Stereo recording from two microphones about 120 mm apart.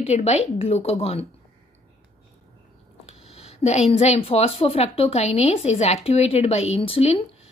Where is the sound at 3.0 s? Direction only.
60° left (ahead or behind).